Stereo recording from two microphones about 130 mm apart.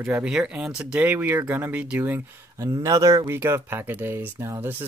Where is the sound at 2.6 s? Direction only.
25° right (ahead or behind).